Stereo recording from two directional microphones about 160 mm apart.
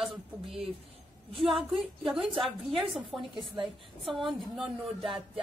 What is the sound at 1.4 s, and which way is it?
A woman's voice, centre (ahead or behind).